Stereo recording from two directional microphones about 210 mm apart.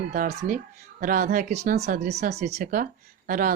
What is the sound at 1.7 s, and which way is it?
Speech, 50° right (ahead or behind).